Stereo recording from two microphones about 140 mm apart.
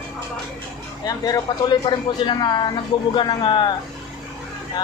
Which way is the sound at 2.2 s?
35° left (ahead or behind).